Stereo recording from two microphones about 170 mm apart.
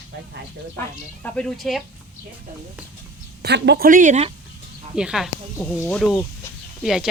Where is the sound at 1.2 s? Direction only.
5° left (ahead or behind).